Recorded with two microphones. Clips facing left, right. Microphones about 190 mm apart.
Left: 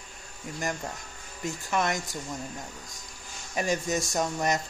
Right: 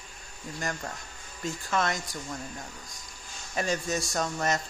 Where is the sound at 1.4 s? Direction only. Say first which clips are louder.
Left 1 dB; 15° left (ahead or behind).